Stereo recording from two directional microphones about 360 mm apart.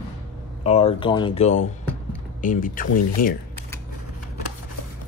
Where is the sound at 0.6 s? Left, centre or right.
Centre.